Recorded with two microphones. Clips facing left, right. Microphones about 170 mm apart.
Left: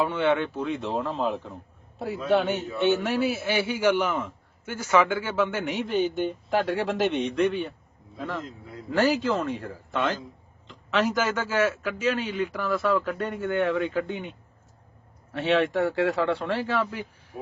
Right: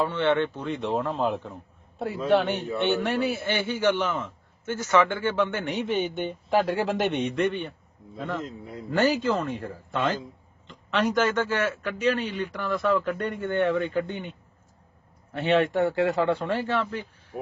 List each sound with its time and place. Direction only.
0.0 s a man's voice: 10° left (ahead or behind)
8.4 s a man's voice: 25° right (ahead or behind)
8.9 s a man's voice: centre (ahead or behind)